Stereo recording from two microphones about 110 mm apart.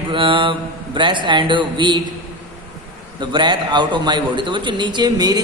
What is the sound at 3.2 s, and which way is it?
A man's voice, 45° right (ahead or behind).